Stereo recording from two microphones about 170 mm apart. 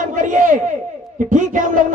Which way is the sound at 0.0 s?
50° right (ahead or behind).